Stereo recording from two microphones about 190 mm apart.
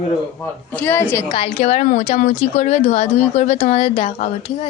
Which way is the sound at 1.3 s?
35° left (ahead or behind).